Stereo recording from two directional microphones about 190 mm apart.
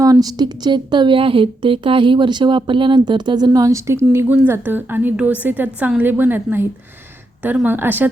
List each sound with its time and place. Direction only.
0.0 s a woman's voice: 20° right (ahead or behind)